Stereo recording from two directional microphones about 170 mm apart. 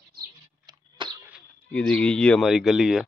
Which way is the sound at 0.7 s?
25° right (ahead or behind).